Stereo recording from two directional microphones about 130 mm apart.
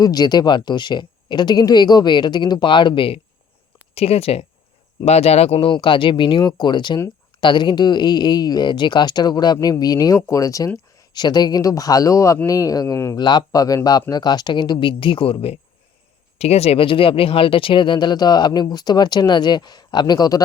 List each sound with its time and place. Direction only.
0.0 s speech: 30° left (ahead or behind)